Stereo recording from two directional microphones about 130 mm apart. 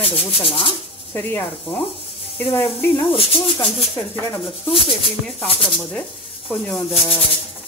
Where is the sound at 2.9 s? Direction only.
45° left (ahead or behind).